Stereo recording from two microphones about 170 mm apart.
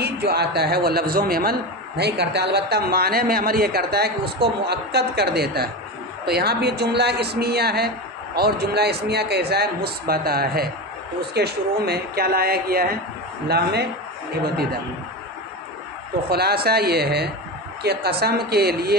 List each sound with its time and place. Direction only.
0.0 s a man's voice: 70° right (ahead or behind)
16.3 s a man's voice: 65° right (ahead or behind)